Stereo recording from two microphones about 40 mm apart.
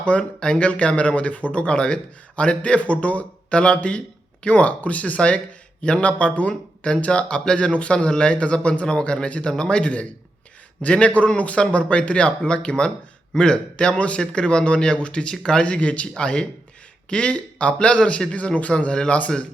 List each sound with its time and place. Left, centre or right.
0.0 s speech: left
0.3 s speech: centre
0.6 s a man's voice: left
10.8 s a man's voice: left
15.6 s a man's voice: left